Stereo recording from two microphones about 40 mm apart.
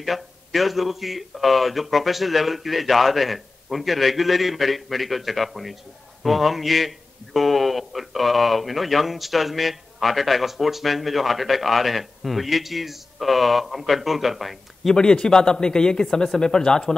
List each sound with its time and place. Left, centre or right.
0.0 s speech: centre
15.0 s speech: centre